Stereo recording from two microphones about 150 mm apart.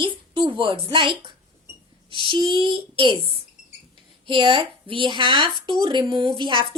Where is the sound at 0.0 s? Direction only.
35° right (ahead or behind).